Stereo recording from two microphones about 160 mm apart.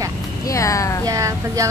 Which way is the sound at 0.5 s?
20° left (ahead or behind).